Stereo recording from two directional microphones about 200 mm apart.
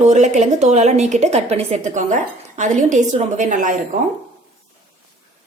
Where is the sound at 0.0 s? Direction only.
35° right (ahead or behind).